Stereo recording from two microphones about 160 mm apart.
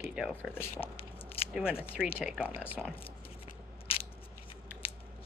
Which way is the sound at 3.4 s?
35° left (ahead or behind).